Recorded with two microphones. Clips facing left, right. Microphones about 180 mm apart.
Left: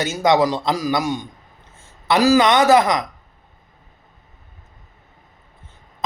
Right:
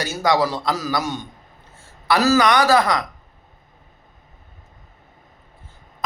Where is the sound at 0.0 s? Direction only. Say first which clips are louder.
Left 3 dB; 20° left (ahead or behind).